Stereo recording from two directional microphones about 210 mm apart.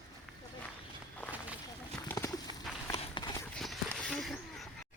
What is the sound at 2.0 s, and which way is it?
Horse, 15° left (ahead or behind).